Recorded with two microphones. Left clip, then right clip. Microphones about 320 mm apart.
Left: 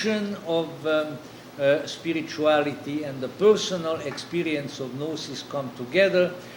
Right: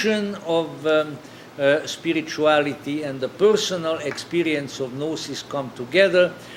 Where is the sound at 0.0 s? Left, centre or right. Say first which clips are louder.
Right 4 dB; right.